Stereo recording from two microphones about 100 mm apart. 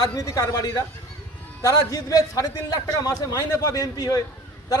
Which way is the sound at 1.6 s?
35° left (ahead or behind).